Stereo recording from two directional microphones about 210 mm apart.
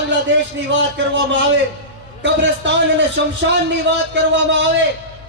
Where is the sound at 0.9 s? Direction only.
60° right (ahead or behind).